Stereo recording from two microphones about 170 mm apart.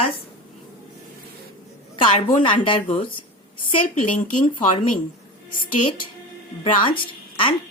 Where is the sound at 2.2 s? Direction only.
30° left (ahead or behind).